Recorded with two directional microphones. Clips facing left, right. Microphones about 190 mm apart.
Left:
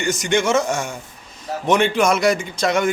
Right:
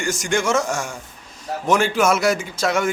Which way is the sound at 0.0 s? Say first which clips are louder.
Left 2 dB; centre (ahead or behind).